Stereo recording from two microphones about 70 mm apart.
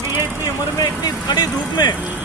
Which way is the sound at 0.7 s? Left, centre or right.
Left.